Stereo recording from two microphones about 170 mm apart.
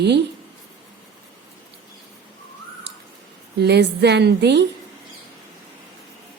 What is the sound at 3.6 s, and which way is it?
A woman's voice, 75° right (ahead or behind).